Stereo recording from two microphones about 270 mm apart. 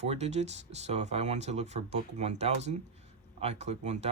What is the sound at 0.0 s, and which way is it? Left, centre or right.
Speech, right.